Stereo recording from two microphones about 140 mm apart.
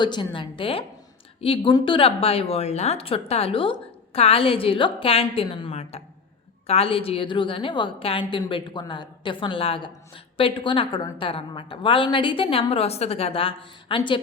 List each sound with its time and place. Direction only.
0.0 s a woman's voice: 35° left (ahead or behind)